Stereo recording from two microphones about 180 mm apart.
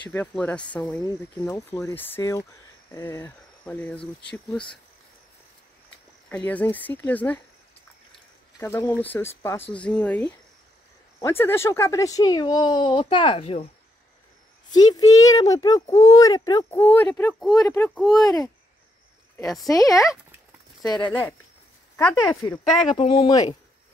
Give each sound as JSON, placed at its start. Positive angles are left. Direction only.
{"t": 0.1, "sound": "speech", "side_deg": 10}
{"t": 6.2, "sound": "speech", "side_deg": 10}
{"t": 8.5, "sound": "speech", "side_deg": 15}
{"t": 14.8, "sound": "speech", "side_deg": 20}
{"t": 16.8, "sound": "speech", "side_deg": 10}
{"t": 17.6, "sound": "speech", "side_deg": 15}
{"t": 19.4, "sound": "speech", "side_deg": 0}
{"t": 19.7, "sound": "speech", "side_deg": 20}
{"t": 20.0, "sound": "speech", "side_deg": 0}
{"t": 21.0, "sound": "speech", "side_deg": 10}
{"t": 22.9, "sound": "speech", "side_deg": 30}